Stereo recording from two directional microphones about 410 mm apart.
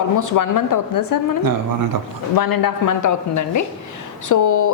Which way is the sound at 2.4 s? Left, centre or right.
Left.